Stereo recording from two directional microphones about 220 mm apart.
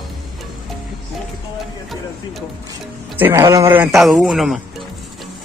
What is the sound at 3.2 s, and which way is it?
A man's voice, 10° right (ahead or behind).